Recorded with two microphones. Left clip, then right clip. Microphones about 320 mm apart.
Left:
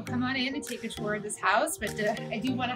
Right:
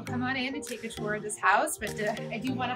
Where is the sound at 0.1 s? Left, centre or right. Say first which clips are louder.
Left 1 dB; centre.